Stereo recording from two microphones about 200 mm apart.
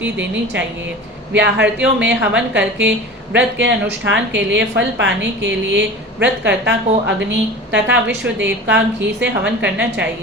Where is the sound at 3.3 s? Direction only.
60° right (ahead or behind).